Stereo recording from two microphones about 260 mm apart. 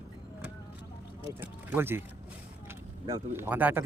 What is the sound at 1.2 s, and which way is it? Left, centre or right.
Speech, centre.